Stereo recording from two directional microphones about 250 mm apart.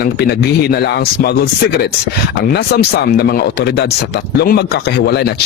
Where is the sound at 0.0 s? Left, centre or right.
Left.